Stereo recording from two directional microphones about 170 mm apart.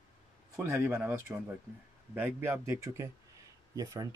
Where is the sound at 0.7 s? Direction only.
5° right (ahead or behind).